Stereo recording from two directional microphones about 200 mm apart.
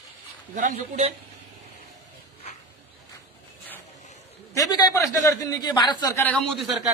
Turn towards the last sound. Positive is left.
turn(degrees=0)  # may be behind; listen again after turning